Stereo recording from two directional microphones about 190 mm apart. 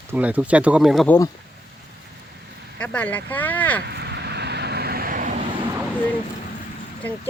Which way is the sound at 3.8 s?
60° right (ahead or behind).